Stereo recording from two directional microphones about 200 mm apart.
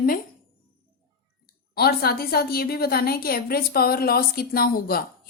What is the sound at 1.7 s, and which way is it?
A woman's voice, 50° left (ahead or behind).